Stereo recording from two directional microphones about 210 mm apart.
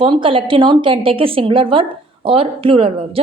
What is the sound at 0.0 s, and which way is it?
Speech, 25° right (ahead or behind).